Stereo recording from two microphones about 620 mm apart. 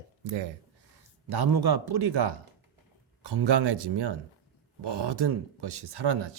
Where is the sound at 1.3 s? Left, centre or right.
Right.